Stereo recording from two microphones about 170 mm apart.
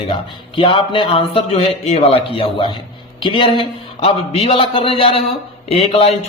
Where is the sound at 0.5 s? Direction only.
30° left (ahead or behind).